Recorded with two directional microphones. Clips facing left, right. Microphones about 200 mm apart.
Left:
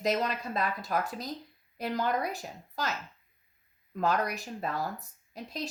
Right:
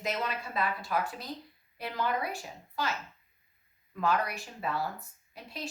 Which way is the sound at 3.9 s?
40° left (ahead or behind).